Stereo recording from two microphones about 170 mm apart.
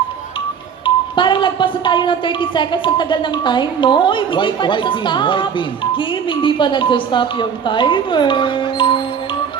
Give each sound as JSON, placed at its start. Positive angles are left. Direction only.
{"t": 0.9, "sound": "speech", "side_deg": 30}